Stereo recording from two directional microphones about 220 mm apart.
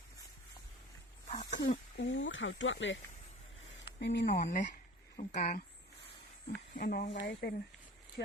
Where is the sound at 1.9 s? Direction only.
55° left (ahead or behind).